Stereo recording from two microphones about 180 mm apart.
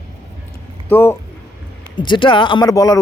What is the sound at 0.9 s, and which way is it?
Speech, 10° left (ahead or behind).